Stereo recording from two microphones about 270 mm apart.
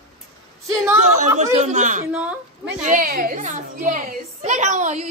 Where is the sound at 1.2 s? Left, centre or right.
Right.